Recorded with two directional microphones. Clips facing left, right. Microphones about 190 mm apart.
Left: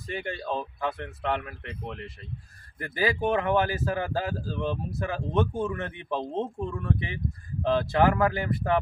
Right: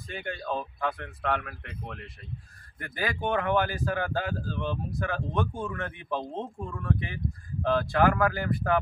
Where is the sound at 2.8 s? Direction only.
30° left (ahead or behind).